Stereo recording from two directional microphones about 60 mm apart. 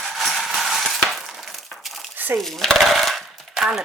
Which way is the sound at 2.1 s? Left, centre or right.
Right.